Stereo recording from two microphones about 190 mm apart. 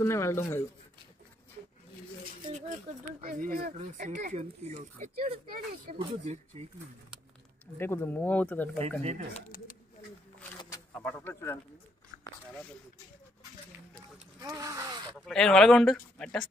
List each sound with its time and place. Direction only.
0.0 s speech: 15° left (ahead or behind)
2.5 s speech: 40° right (ahead or behind)
3.7 s speech: 40° right (ahead or behind)
7.7 s speech: 10° left (ahead or behind)
8.7 s speech: 35° right (ahead or behind)
9.3 s speech: 45° left (ahead or behind)
11.0 s speech: 10° left (ahead or behind)
14.4 s speech: 20° right (ahead or behind)
15.1 s speech: centre (ahead or behind)